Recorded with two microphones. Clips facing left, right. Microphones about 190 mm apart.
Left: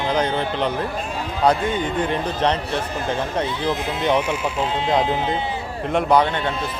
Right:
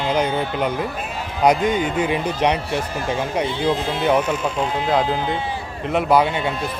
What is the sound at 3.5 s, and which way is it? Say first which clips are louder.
Speech: right 3 dB; 30° right (ahead or behind).